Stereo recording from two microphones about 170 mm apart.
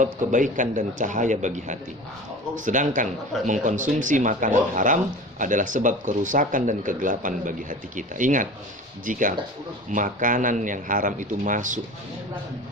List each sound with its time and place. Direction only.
0.0 s speech: 50° right (ahead or behind)